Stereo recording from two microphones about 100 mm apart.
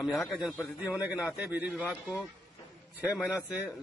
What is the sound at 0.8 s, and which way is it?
Speech, 15° right (ahead or behind).